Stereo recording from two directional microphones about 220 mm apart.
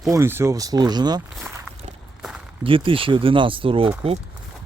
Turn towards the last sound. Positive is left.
turn(degrees=-25)  # may be behind; listen again after turning